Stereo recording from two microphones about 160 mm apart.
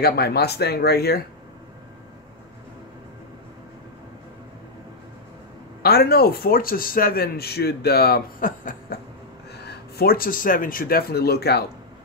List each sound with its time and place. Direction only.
0.0 s speech: 75° left (ahead or behind)
5.8 s a man's voice: 80° left; by 8.9 s 55° left (ahead or behind)
9.6 s speech: 85° left